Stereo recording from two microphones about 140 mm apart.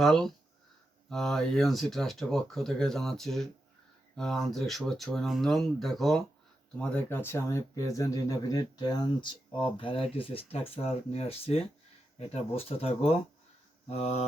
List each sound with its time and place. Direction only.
0.0 s speech: centre (ahead or behind); by 14.3 s 50° left (ahead or behind)